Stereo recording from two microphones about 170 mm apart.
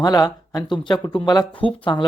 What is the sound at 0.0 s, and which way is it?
Speech, 25° left (ahead or behind).